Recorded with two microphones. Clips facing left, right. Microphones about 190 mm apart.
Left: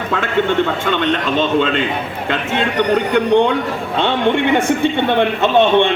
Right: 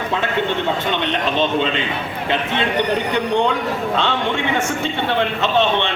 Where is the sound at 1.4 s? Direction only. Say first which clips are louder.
Left 3 dB; 50° left (ahead or behind).